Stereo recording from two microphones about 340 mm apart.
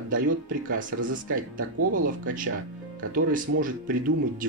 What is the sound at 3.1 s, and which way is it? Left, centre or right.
Speech, right.